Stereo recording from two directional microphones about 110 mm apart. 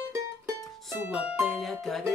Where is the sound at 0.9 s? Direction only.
15° right (ahead or behind).